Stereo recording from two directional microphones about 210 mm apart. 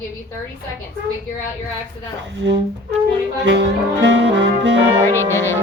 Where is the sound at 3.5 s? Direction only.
55° right (ahead or behind).